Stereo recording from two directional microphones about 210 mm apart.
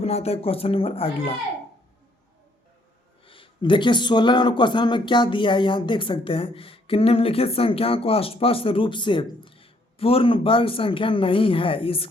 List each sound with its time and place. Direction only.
0.0 s speech: 30° left (ahead or behind)
3.2 s speech: 25° left (ahead or behind)